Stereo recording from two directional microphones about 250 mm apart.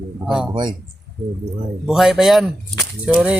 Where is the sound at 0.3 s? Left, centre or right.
Centre.